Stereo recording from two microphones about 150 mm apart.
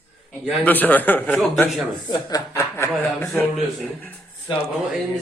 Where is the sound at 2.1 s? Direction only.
25° left (ahead or behind).